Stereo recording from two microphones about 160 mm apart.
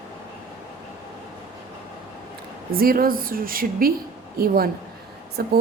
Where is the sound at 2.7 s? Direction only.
65° right (ahead or behind).